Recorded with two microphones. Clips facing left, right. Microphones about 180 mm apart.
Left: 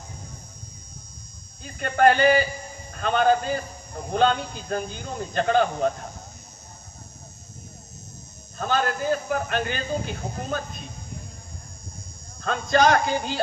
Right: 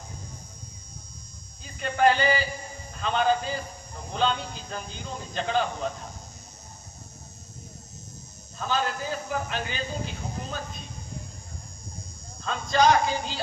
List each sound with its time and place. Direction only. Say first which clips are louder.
1.6 s speech: left 3 dB; 55° left (ahead or behind)
8.5 s a man's voice: left 4 dB; 55° left (ahead or behind)
12.4 s a man's voice: left 3 dB; 55° left (ahead or behind)